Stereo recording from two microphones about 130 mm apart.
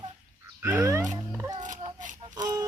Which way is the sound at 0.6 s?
20° right (ahead or behind).